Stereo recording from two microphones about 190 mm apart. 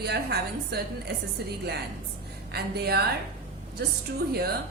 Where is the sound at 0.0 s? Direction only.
55° right (ahead or behind).